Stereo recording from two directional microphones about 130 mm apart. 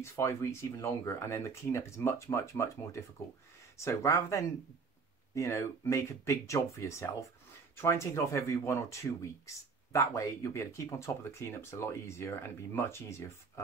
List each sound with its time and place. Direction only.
0.0 s speech: 20° left (ahead or behind)